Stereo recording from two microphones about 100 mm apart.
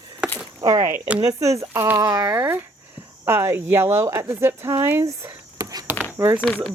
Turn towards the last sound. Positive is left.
turn(degrees=5)  # may be behind; listen again after turning